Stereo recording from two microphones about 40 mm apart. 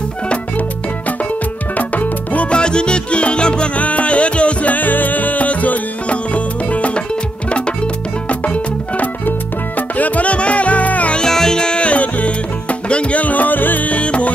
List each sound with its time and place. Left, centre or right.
1.8 s music: left
2.5 s music: left
3.7 s music: left
11.1 s music: centre; by 13.9 s left
13.9 s music: left